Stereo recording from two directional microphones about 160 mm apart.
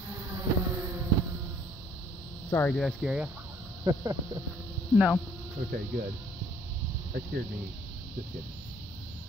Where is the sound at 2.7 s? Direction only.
Centre (ahead or behind).